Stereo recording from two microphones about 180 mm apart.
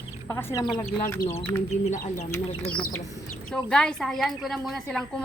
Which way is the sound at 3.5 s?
5° left (ahead or behind).